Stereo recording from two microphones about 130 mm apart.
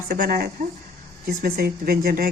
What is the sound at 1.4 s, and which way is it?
Speech, 90° right.